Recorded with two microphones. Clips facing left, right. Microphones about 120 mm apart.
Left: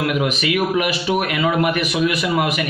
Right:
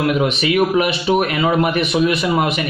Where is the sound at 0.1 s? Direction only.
30° right (ahead or behind).